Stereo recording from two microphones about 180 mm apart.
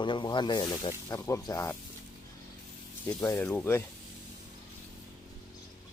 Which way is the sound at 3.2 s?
15° left (ahead or behind).